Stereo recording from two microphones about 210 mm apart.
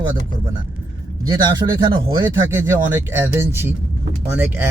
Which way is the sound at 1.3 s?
20° right (ahead or behind).